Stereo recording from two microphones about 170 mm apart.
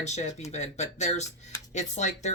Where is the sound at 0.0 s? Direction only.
40° left (ahead or behind).